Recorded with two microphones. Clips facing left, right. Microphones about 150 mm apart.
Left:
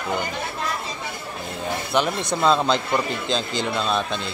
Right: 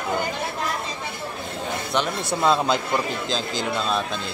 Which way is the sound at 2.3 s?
5° right (ahead or behind).